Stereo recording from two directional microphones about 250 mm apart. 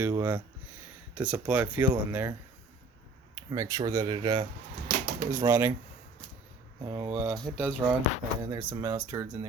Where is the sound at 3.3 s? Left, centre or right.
Centre.